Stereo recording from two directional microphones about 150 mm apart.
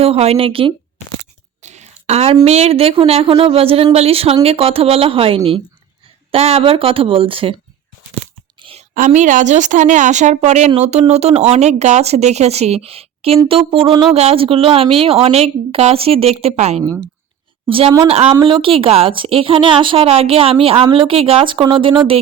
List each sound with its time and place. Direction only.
0.0 s a woman's voice: 45° right (ahead or behind)
1.6 s a woman's voice: 50° right (ahead or behind)
9.0 s a woman's voice: 55° right (ahead or behind)
16.8 s speech: 25° right (ahead or behind)
17.7 s a woman's voice: 35° right (ahead or behind)